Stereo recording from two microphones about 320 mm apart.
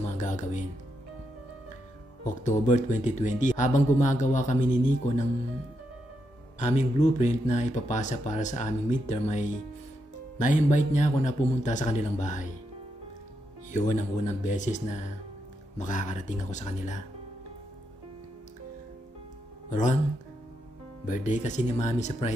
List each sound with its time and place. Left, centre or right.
0.2 s music: left
2.4 s speech: left
6.6 s speech: left
10.4 s speech: left
13.7 s speech: left
19.7 s speech: left
21.1 s speech: left